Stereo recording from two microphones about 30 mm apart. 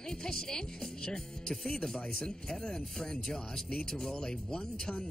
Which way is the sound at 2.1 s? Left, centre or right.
Left.